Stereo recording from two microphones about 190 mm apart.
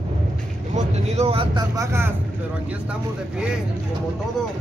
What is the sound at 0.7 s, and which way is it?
Speech, 35° right (ahead or behind).